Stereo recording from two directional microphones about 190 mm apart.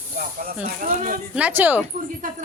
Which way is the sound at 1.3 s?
10° right (ahead or behind).